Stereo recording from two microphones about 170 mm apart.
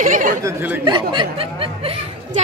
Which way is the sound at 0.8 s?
30° right (ahead or behind).